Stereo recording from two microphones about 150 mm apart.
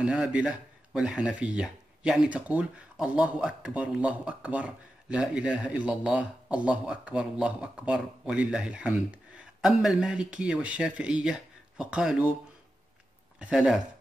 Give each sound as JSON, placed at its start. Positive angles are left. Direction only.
{"t": 0.0, "sound": "speech", "side_deg": -5}
{"t": 13.4, "sound": "speech", "side_deg": -5}